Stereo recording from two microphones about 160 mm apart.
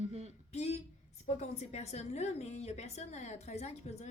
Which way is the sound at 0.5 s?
45° left (ahead or behind).